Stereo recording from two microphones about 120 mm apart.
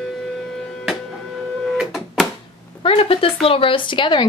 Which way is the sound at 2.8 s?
55° left (ahead or behind).